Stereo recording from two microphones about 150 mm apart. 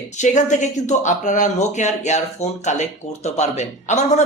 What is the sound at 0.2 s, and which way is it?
A man's voice, 55° left (ahead or behind).